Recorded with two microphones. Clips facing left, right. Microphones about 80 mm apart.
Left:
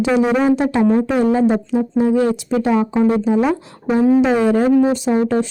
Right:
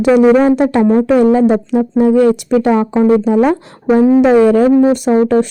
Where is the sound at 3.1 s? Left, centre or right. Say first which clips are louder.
Right 8 dB; right.